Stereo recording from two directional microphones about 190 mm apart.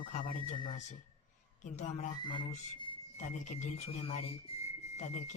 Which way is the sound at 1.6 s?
40° left (ahead or behind).